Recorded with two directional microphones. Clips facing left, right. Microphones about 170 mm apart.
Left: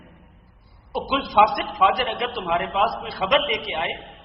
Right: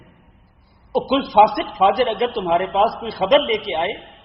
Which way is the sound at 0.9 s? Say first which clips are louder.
Right 5 dB; 30° right (ahead or behind).